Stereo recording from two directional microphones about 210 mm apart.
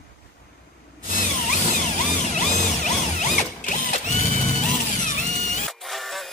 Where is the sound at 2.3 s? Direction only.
35° left (ahead or behind).